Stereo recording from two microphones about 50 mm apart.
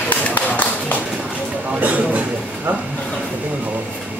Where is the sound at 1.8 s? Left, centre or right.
Right.